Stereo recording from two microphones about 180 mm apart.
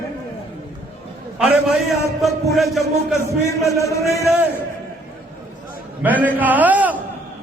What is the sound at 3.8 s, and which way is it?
Speech, 15° left (ahead or behind).